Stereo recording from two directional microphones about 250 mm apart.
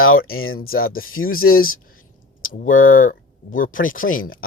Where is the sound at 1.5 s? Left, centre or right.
Left.